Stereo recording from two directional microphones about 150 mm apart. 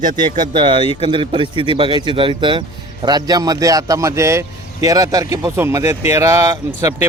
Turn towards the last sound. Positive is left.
turn(degrees=-20)  # may be behind; listen again after turning